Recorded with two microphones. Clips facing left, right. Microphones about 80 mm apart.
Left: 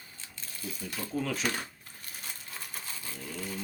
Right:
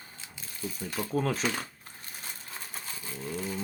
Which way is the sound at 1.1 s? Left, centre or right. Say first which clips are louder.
Right 4 dB; right.